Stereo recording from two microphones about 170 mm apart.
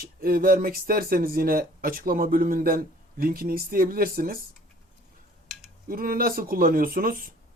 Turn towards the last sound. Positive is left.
turn(degrees=-60)  # may be behind; listen again after turning